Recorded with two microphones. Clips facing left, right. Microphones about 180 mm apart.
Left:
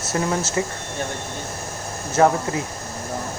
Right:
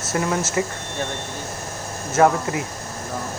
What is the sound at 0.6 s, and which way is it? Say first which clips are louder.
Speech: right 1 dB; 30° left (ahead or behind).